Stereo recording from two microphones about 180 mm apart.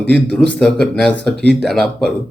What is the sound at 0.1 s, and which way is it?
A man's voice, 5° left (ahead or behind).